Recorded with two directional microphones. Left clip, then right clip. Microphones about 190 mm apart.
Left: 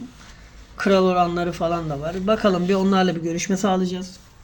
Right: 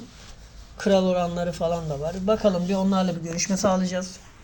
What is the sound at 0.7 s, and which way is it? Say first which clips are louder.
A man's voice: left 4 dB; 35° right (ahead or behind).